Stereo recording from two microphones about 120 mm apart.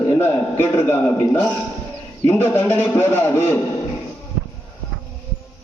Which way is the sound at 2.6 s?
15° left (ahead or behind).